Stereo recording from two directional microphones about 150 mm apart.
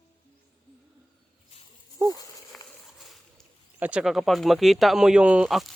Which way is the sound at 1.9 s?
25° right (ahead or behind).